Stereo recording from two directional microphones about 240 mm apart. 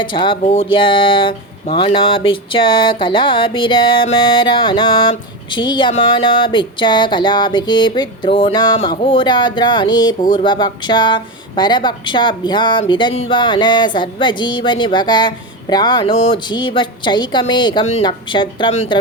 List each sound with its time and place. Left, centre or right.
0.0 s speech: left